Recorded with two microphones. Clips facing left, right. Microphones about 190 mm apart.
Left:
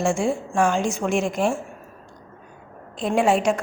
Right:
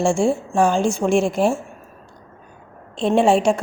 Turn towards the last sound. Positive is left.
turn(degrees=-30)  # may be behind; listen again after turning